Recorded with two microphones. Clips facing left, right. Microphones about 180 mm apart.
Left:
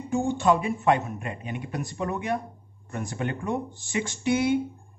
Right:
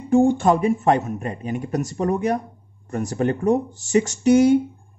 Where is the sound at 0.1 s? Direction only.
50° right (ahead or behind).